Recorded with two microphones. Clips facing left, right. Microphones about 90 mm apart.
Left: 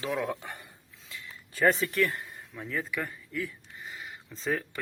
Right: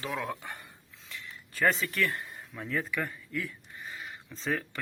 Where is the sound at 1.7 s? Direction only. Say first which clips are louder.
Left 3 dB; 40° left (ahead or behind).